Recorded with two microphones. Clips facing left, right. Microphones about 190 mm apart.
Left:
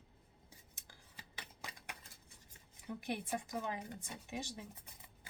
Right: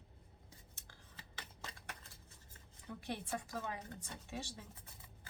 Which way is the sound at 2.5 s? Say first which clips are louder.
Left 4 dB; 15° left (ahead or behind).